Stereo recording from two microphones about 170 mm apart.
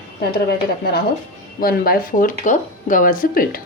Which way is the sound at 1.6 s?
60° left (ahead or behind).